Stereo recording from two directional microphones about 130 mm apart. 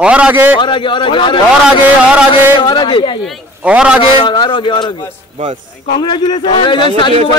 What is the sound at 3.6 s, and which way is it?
Speech, 10° right (ahead or behind).